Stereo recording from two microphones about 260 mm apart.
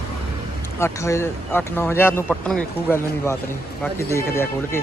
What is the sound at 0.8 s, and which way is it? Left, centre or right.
Speech, centre.